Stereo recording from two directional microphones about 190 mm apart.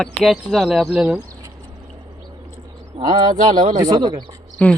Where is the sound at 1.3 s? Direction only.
20° right (ahead or behind).